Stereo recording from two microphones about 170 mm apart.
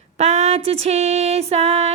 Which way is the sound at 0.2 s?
40° right (ahead or behind).